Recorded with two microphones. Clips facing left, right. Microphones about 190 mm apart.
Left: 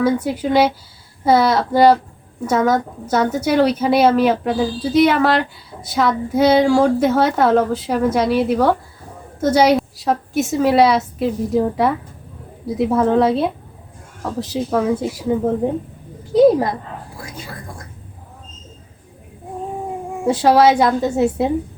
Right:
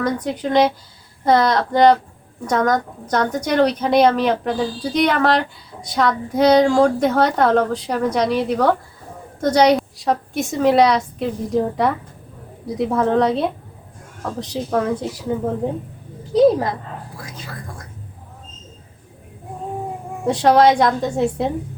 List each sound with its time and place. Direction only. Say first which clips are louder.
0.0 s a woman's voice: left 4 dB; 5° left (ahead or behind)
16.3 s speech: left 2 dB; 10° left (ahead or behind)
20.2 s a woman's voice: left 1 dB; 5° left (ahead or behind)